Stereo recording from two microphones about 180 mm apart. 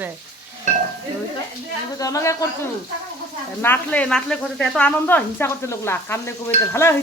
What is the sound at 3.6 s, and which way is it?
Speech, 10° left (ahead or behind).